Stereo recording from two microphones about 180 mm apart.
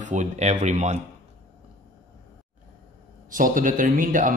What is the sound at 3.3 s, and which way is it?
Speech, 50° right (ahead or behind).